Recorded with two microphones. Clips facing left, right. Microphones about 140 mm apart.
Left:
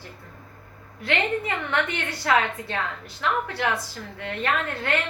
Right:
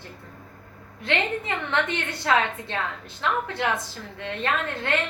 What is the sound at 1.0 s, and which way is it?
A woman's voice, 25° right (ahead or behind).